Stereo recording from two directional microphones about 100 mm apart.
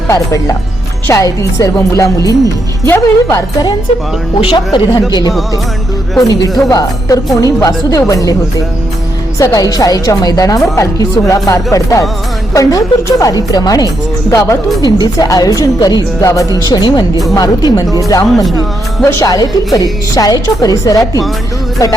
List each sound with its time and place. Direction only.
0.1 s speech: 35° left (ahead or behind)
4.4 s speech: 55° left (ahead or behind)
6.1 s speech: 40° left (ahead or behind)
14.8 s a woman's voice: 45° left (ahead or behind)
19.2 s speech: 40° left (ahead or behind)